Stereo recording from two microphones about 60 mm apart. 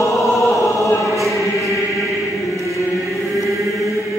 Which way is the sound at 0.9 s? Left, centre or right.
Left.